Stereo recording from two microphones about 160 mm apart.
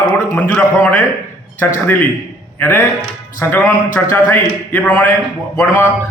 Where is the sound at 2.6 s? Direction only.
15° left (ahead or behind).